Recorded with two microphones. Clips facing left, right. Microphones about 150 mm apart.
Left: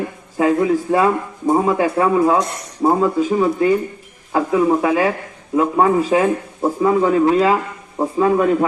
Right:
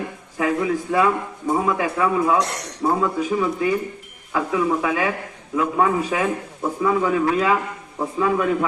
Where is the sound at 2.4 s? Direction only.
75° right (ahead or behind).